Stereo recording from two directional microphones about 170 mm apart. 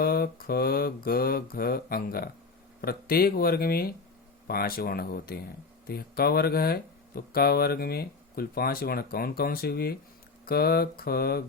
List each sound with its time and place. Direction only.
0.0 s speech: 65° left (ahead or behind)